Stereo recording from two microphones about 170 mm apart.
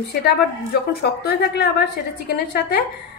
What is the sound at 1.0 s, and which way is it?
A woman's voice, 70° left (ahead or behind).